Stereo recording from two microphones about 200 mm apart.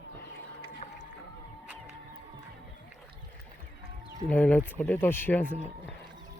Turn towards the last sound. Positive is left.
turn(degrees=10)  # may be behind; listen again after turning